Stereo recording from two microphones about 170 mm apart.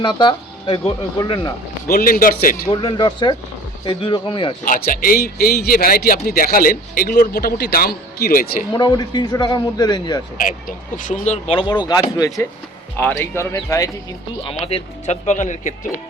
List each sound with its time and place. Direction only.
0.0 s a man's voice: 25° left (ahead or behind)
1.9 s a man's voice: 60° left (ahead or behind)
2.6 s a man's voice: 25° left (ahead or behind)
4.6 s a man's voice: 55° left (ahead or behind)
8.7 s a man's voice: 25° left (ahead or behind)
10.3 s speech: 55° left (ahead or behind); by 11.8 s 30° left (ahead or behind)
12.1 s a man's voice: 20° left (ahead or behind)
14.4 s speech: 35° left (ahead or behind)